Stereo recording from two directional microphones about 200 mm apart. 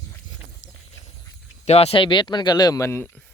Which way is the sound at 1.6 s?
30° left (ahead or behind).